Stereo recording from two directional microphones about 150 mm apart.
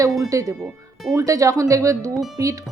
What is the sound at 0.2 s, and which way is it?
Speech, 20° right (ahead or behind).